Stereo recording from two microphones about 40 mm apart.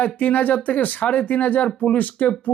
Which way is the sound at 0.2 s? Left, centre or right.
Left.